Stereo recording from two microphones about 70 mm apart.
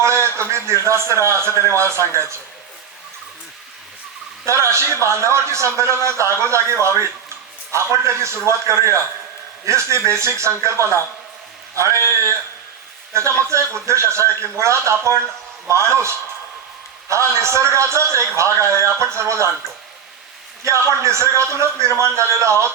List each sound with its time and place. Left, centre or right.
0.0 s a man's voice: right
4.4 s a man's voice: right
20.7 s a man's voice: right